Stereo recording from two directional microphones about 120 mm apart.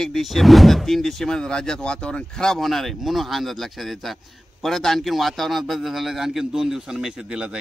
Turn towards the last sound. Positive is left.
turn(degrees=-5)  # may be behind; listen again after turning